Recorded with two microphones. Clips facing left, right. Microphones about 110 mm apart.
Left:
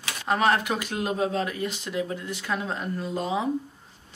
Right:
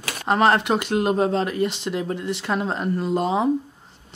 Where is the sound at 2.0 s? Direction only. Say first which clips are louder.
Right 6 dB; 65° right (ahead or behind).